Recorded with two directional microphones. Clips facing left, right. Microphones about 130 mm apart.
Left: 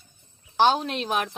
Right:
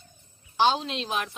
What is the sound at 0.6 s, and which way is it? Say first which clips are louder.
Speech: left 3 dB; 50° left (ahead or behind).